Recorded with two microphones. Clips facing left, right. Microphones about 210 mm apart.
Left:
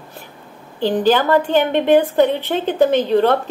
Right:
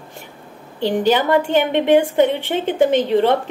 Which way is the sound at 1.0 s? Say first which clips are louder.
Left 1 dB; 20° right (ahead or behind).